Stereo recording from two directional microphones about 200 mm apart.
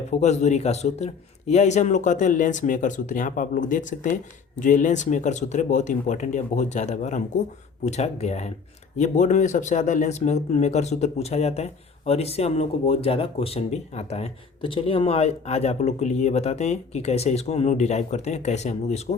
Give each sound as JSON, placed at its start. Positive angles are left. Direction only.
{"t": 0.2, "sound": "speech", "side_deg": 35}